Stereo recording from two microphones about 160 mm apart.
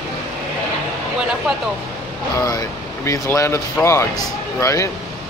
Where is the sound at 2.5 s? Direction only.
20° left (ahead or behind).